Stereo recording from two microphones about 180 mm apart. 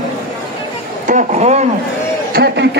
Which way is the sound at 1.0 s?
40° right (ahead or behind).